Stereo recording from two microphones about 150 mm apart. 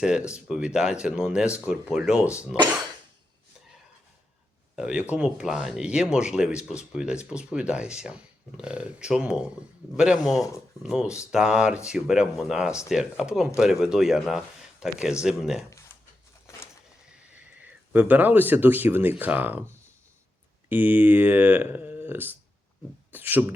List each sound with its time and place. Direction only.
0.0 s speech: 5° right (ahead or behind)
4.8 s speech: 10° right (ahead or behind)
17.6 s speech: 10° right (ahead or behind)
20.7 s speech: 10° right (ahead or behind)